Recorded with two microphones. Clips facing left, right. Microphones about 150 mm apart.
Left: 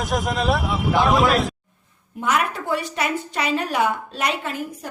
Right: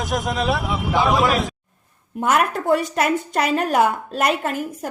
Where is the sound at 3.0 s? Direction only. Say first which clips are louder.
Right 4 dB; 50° right (ahead or behind).